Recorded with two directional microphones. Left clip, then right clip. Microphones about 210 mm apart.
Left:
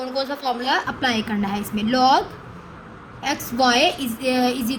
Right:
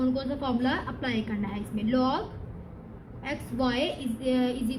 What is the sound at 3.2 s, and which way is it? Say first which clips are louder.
A woman's voice: left 11 dB; 40° left (ahead or behind).